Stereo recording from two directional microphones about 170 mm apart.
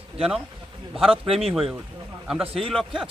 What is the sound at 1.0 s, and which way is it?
Speech, 30° right (ahead or behind).